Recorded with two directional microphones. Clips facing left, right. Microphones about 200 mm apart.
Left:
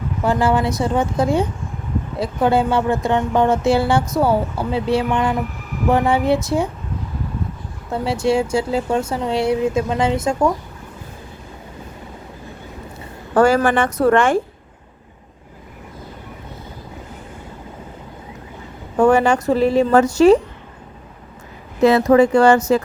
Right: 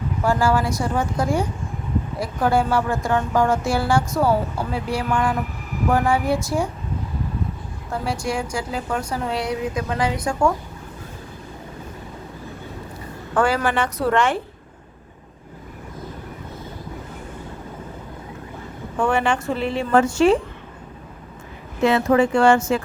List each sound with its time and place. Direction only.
0.3 s speech: 20° left (ahead or behind)
7.9 s speech: 25° left (ahead or behind)
13.3 s a woman's voice: 45° left (ahead or behind)
18.9 s a woman's voice: 40° left (ahead or behind)
21.8 s a woman's voice: 40° left (ahead or behind)